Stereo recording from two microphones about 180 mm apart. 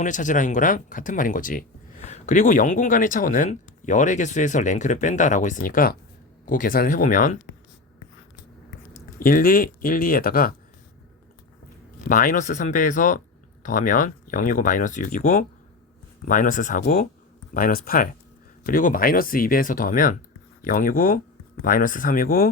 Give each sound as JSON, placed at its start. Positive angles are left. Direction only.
{"t": 0.0, "sound": "speech", "side_deg": 45}
{"t": 9.1, "sound": "speech", "side_deg": 50}
{"t": 11.9, "sound": "speech", "side_deg": 50}